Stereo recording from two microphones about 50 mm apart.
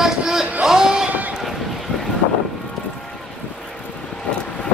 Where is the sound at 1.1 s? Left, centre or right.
Right.